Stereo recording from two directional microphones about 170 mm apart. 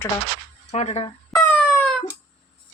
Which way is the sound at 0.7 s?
40° left (ahead or behind).